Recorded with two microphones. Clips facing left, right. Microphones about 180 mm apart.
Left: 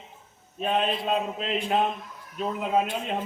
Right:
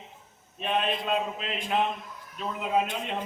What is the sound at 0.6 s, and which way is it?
Speech, 40° left (ahead or behind).